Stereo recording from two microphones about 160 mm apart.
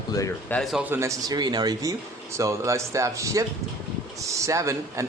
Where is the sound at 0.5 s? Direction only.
Centre (ahead or behind).